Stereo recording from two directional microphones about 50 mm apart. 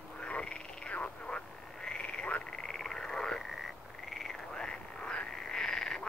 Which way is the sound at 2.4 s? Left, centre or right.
Centre.